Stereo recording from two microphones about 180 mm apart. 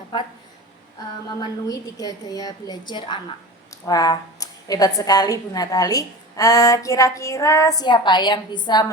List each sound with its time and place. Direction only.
0.1 s a woman's voice: 25° left (ahead or behind)
1.4 s a woman's voice: 20° left (ahead or behind)